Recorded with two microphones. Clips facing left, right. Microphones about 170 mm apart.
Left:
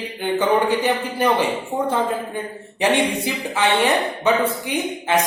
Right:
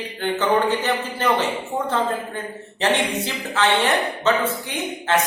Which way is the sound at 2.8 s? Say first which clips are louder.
Left 3 dB; 10° left (ahead or behind).